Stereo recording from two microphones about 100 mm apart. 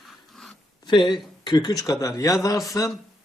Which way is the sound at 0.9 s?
50° left (ahead or behind).